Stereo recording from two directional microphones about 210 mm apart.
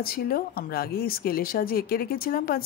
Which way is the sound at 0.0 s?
45° left (ahead or behind).